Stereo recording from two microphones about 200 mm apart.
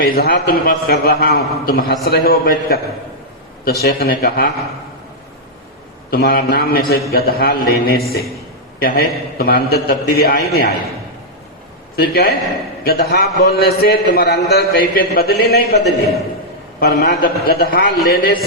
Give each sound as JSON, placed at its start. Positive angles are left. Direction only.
{"t": 0.0, "sound": "a man's voice", "side_deg": 50}
{"t": 6.1, "sound": "a man's voice", "side_deg": 50}
{"t": 11.9, "sound": "a man's voice", "side_deg": 50}
{"t": 16.8, "sound": "a man's voice", "side_deg": 50}